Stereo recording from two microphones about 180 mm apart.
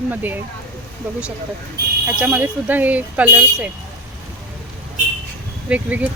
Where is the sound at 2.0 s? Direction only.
10° right (ahead or behind).